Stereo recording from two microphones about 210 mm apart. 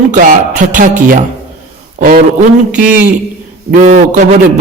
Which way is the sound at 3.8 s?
35° right (ahead or behind).